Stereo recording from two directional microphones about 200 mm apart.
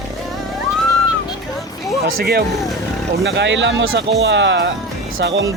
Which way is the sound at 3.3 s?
60° right (ahead or behind).